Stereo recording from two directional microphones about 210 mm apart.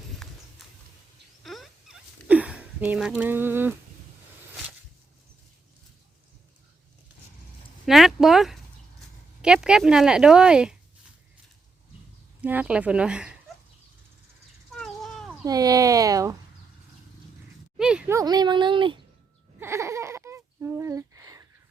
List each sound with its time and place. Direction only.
0.2 s horse: centre (ahead or behind)
1.5 s rodents: centre (ahead or behind)
3.2 s speech: 10° right (ahead or behind)
7.9 s speech: centre (ahead or behind)
12.4 s speech: 5° right (ahead or behind)
14.8 s a sound: centre (ahead or behind)
15.4 s speech: 15° right (ahead or behind)
17.7 s a sound: 5° right (ahead or behind)
18.2 s speech: 20° right (ahead or behind)
19.5 s a sound: 10° right (ahead or behind)